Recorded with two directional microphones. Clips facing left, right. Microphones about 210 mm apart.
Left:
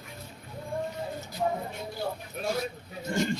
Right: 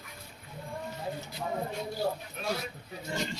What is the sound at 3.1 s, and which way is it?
Pig, 50° left (ahead or behind).